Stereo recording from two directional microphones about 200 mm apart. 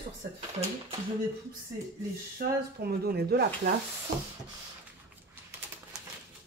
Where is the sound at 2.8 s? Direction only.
50° right (ahead or behind).